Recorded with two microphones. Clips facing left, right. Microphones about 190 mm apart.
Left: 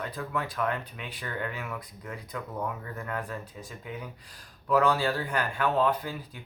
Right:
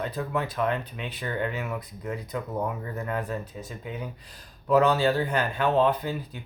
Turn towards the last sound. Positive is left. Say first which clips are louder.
# right 3 dB
turn(degrees=-25)  # may be behind; listen again after turning